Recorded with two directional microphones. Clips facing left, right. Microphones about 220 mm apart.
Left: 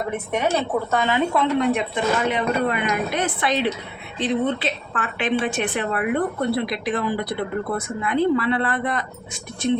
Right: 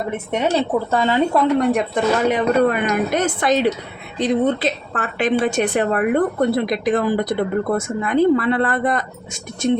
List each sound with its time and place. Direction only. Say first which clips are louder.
0.3 s a woman's voice: right 4 dB; 25° right (ahead or behind); by 9.7 s 45° right (ahead or behind)